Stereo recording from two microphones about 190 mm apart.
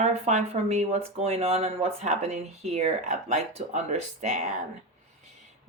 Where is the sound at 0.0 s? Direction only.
35° right (ahead or behind).